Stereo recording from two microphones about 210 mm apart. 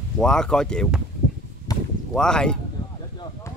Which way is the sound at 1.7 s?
20° left (ahead or behind).